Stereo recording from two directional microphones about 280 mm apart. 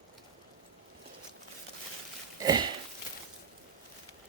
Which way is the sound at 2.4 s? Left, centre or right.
Centre.